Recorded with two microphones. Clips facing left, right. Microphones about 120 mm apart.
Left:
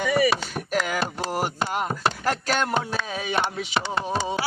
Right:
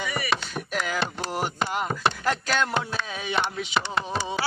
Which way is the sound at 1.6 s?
5° left (ahead or behind).